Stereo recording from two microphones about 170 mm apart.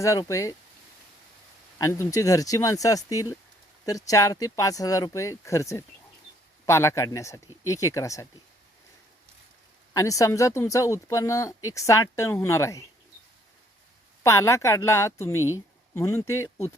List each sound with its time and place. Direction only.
0.0 s speech: 20° left (ahead or behind)
1.8 s speech: 20° left (ahead or behind)
9.9 s speech: 20° left (ahead or behind)
14.3 s speech: 15° left (ahead or behind)